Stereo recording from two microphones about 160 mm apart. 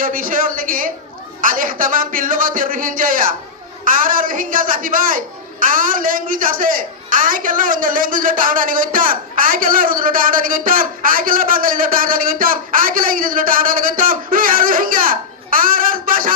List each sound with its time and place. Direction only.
0.0 s a man's voice: 60° right (ahead or behind)